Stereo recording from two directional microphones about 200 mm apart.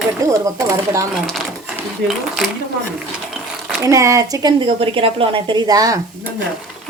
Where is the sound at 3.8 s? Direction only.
15° right (ahead or behind).